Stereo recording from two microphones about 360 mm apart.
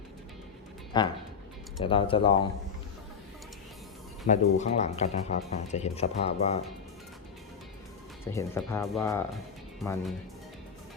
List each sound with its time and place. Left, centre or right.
0.9 s speech: centre
4.3 s speech: centre
8.3 s speech: centre